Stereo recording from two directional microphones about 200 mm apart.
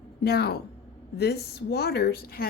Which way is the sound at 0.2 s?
55° left (ahead or behind).